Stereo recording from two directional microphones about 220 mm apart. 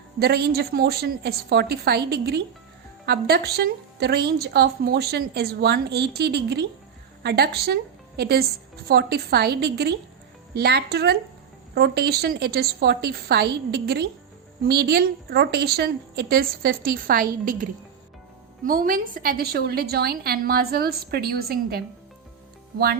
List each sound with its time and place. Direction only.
0.2 s a woman's voice: 45° right (ahead or behind)